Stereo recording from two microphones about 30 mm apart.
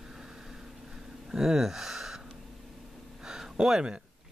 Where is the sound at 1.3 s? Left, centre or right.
Centre.